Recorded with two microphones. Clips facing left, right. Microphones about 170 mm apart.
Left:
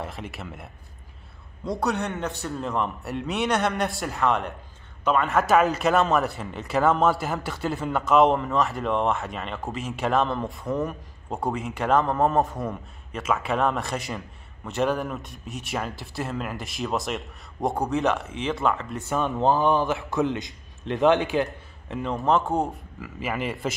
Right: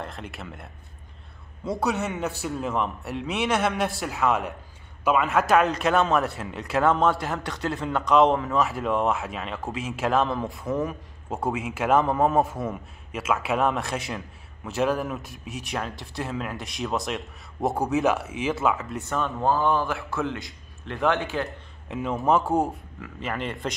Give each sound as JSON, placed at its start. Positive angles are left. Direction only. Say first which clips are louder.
{"t": 0.0, "sound": "a man's voice", "louder": "left 1 dB", "side_deg": 0}
{"t": 19.0, "sound": "a man's voice", "louder": "left 3 dB", "side_deg": 15}
{"t": 21.5, "sound": "a man's voice", "louder": "even", "side_deg": 0}